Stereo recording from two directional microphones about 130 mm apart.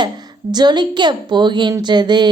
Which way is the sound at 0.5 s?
35° right (ahead or behind).